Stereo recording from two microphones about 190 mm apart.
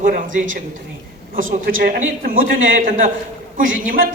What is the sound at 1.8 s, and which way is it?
A man's voice, 50° right (ahead or behind).